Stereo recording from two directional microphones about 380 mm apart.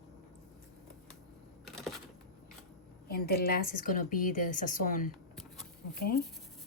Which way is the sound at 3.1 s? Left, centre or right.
Left.